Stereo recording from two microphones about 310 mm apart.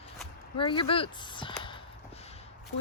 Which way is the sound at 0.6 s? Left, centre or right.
Centre.